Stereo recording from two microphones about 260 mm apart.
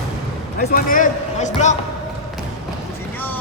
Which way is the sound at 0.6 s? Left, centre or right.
Left.